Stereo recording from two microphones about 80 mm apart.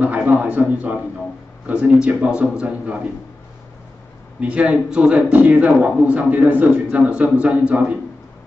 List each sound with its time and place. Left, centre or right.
0.0 s a man's voice: centre
4.4 s a man's voice: centre